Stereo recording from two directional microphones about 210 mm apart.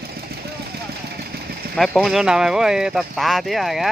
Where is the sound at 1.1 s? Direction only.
50° right (ahead or behind).